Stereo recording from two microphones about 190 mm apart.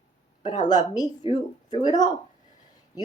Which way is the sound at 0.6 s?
20° left (ahead or behind).